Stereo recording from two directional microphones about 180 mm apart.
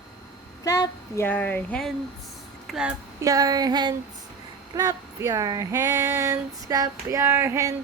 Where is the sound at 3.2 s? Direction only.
20° right (ahead or behind).